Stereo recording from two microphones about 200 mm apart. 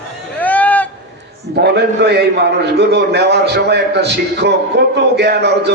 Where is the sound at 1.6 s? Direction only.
55° right (ahead or behind).